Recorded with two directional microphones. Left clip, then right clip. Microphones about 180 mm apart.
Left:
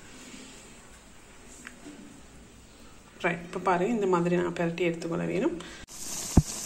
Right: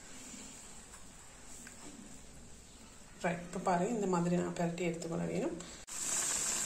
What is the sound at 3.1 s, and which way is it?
Speech, centre (ahead or behind).